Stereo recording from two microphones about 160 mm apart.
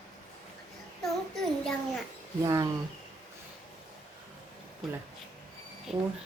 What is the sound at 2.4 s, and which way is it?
Speech, 20° right (ahead or behind).